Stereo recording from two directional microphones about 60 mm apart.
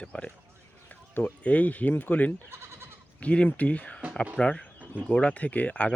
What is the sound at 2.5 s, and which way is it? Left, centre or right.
Goat, right.